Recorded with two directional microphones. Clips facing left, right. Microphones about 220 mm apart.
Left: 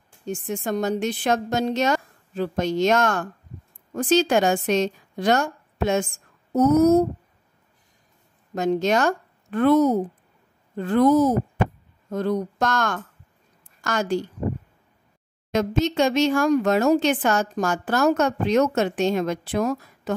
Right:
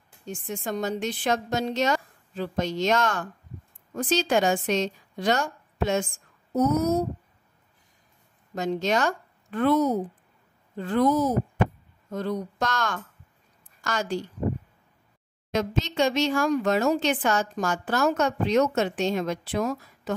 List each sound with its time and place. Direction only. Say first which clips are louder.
0.3 s a woman's voice: left 5 dB; 50° left (ahead or behind)
8.5 s speech: left 4 dB; 50° left (ahead or behind)
15.5 s speech: left 5 dB; 50° left (ahead or behind)